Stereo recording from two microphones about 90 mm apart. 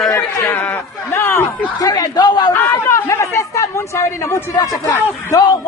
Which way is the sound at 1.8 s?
45° left (ahead or behind).